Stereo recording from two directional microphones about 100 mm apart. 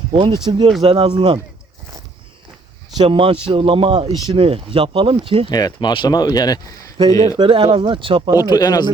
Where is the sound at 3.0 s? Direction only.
70° right (ahead or behind).